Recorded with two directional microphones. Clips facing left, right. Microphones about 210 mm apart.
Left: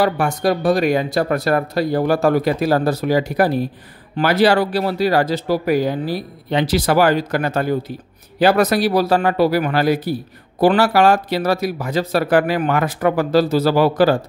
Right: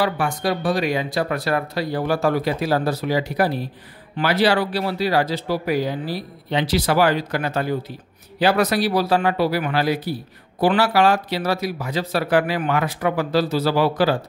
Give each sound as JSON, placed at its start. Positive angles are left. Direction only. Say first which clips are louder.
{"t": 0.0, "sound": "speech", "louder": "left 4 dB", "side_deg": 45}